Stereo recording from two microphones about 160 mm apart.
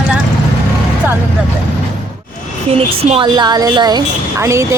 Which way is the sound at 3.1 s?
30° right (ahead or behind).